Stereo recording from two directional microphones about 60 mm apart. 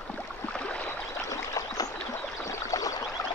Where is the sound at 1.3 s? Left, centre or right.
Left.